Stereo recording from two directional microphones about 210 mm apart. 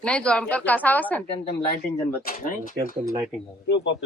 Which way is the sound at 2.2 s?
40° left (ahead or behind).